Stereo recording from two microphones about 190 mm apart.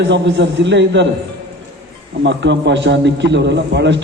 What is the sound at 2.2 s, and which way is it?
A man's voice, 70° right (ahead or behind).